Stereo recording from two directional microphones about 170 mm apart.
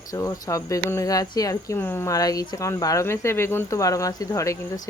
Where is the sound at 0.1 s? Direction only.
20° left (ahead or behind).